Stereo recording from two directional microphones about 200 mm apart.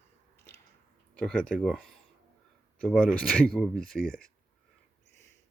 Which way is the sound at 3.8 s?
45° left (ahead or behind).